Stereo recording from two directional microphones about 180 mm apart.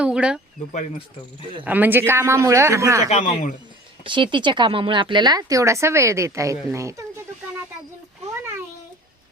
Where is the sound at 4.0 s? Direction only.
25° right (ahead or behind).